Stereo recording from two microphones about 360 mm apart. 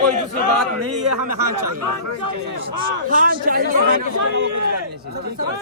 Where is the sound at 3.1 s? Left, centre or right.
Right.